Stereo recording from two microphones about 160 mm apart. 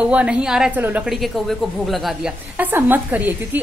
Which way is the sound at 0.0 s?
10° right (ahead or behind).